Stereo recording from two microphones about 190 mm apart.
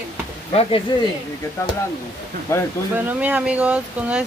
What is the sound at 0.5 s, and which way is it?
Speech, 30° left (ahead or behind).